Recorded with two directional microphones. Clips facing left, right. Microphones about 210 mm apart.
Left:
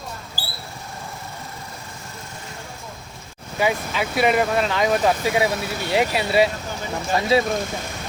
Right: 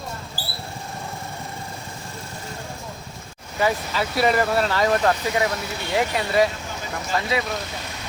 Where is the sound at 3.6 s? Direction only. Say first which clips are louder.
Even; 15° left (ahead or behind).